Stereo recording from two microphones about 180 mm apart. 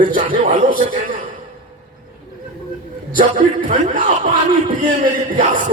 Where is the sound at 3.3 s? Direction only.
40° right (ahead or behind).